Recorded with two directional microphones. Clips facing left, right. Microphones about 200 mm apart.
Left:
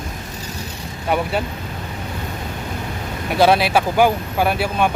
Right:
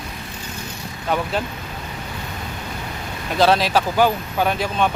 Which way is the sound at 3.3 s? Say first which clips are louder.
Left 2 dB; 10° left (ahead or behind).